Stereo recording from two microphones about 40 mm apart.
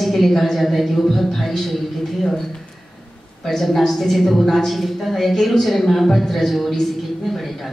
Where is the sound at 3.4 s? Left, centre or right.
Centre.